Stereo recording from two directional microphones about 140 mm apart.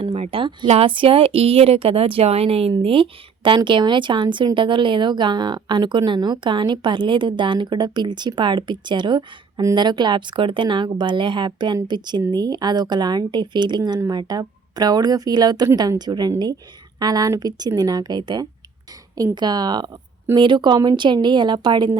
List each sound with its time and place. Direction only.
0.0 s a woman's voice: 45° right (ahead or behind)